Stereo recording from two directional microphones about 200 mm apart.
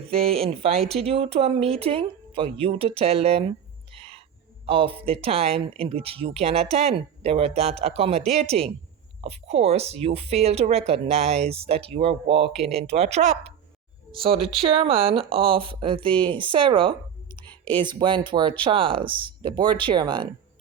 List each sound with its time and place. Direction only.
0.1 s speech: 30° right (ahead or behind)
3.9 s owl: 30° right (ahead or behind)
4.6 s speech: 25° right (ahead or behind)